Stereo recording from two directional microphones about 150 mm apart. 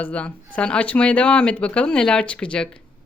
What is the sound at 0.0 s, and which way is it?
Speech, 10° left (ahead or behind).